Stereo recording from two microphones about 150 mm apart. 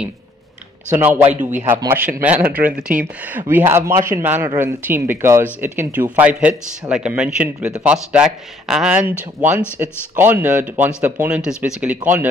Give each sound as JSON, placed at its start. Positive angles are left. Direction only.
{"t": 0.9, "sound": "speech", "side_deg": -15}